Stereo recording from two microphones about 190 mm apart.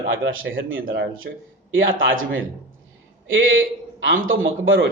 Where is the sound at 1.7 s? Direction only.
90° right.